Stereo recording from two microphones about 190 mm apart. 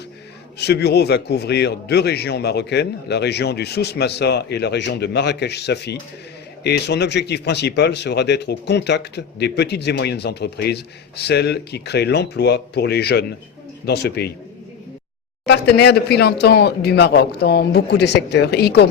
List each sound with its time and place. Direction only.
0.6 s speech: 60° left (ahead or behind)
15.7 s speech: 60° left (ahead or behind)